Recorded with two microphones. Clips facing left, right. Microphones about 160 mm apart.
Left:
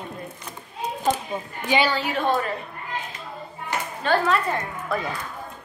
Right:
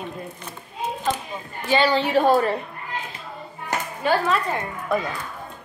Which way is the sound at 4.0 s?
5° right (ahead or behind).